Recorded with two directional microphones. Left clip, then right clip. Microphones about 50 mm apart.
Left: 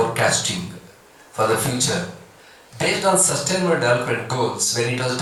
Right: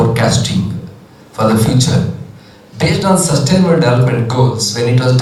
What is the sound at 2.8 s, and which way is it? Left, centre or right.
A man's voice, right.